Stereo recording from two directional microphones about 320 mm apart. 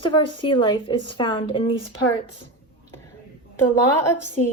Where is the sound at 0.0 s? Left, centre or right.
Centre.